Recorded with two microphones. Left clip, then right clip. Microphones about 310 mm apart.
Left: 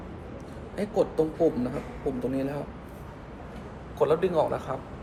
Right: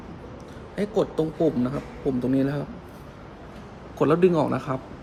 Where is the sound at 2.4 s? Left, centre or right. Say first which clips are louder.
Right 5 dB; right.